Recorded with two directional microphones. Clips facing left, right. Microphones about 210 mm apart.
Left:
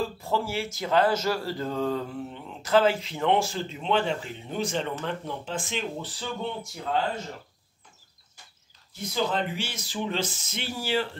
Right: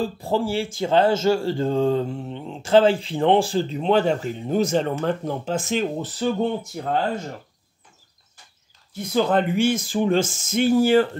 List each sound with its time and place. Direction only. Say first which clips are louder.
0.0 s speech: right 5 dB; 30° right (ahead or behind); by 7.0 s 50° right (ahead or behind)
9.1 s speech: right 8 dB; 55° right (ahead or behind)